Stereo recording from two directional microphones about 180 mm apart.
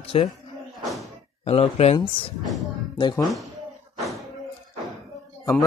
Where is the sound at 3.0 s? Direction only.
25° left (ahead or behind).